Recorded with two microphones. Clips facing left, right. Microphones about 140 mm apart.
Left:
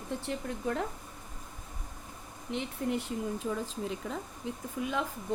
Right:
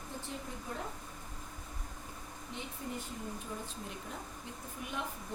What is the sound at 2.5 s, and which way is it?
Speech, 80° left.